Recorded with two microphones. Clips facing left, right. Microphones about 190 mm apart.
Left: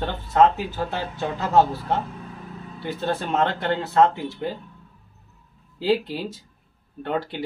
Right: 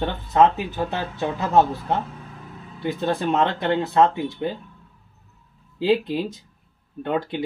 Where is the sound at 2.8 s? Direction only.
15° right (ahead or behind).